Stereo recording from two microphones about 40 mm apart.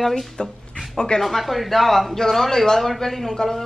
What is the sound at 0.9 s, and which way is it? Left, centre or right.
Speech, centre.